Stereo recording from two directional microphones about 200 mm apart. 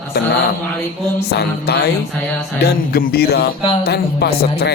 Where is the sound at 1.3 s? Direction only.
55° left (ahead or behind).